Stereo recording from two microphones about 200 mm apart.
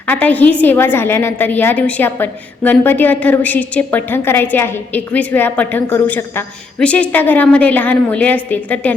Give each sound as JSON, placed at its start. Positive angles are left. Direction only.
{"t": 0.1, "sound": "a woman's voice", "side_deg": 10}